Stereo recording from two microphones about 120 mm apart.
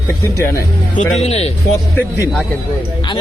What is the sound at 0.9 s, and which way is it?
Speech, 70° left (ahead or behind).